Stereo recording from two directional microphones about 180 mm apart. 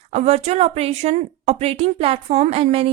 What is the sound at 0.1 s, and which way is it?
A woman's voice, 35° right (ahead or behind).